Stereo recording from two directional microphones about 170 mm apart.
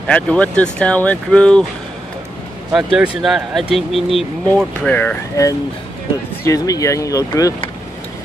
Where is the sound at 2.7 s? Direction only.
Centre (ahead or behind); by 7.6 s 20° left (ahead or behind).